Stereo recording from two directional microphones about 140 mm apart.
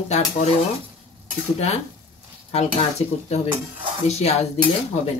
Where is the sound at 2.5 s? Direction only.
50° left (ahead or behind).